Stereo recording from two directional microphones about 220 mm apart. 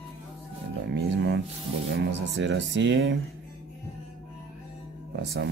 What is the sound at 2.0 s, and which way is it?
Speech, 55° right (ahead or behind).